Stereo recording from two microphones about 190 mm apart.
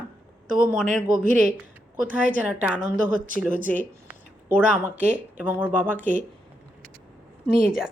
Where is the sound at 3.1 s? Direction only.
45° right (ahead or behind).